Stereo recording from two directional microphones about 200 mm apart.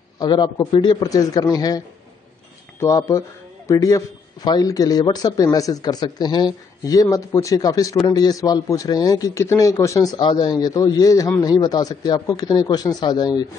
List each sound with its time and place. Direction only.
0.2 s a man's voice: 20° left (ahead or behind)
2.8 s a man's voice: 15° left (ahead or behind)